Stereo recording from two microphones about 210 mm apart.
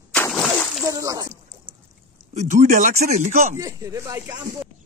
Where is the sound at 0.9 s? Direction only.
15° right (ahead or behind).